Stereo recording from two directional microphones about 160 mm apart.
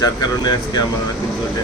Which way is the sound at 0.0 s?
25° left (ahead or behind).